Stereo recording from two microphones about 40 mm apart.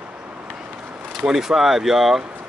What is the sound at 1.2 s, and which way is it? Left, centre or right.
Speech, centre.